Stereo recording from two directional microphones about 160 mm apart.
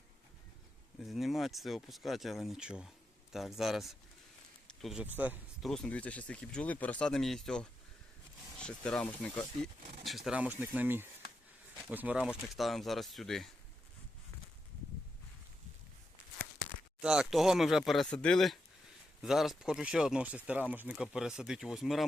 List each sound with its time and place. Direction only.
1.0 s speech: centre (ahead or behind)
5.6 s speech: 5° left (ahead or behind)
17.0 s speech: 5° right (ahead or behind)